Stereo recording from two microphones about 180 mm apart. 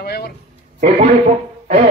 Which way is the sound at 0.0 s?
60° left (ahead or behind).